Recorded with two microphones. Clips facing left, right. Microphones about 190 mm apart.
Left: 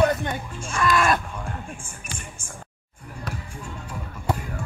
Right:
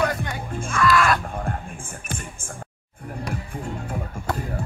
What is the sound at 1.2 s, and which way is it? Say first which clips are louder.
Music: right 5 dB; 55° right (ahead or behind).